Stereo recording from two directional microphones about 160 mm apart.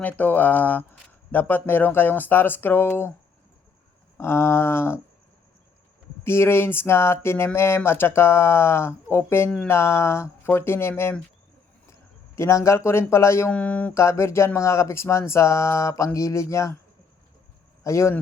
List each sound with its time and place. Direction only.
0.0 s speech: 10° left (ahead or behind)
4.2 s speech: 15° left (ahead or behind)
6.2 s speech: 15° left (ahead or behind)
12.4 s speech: 20° left (ahead or behind)
17.8 s speech: 20° left (ahead or behind)